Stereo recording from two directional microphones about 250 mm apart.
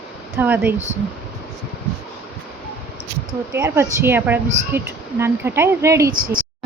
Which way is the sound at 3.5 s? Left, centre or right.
Centre.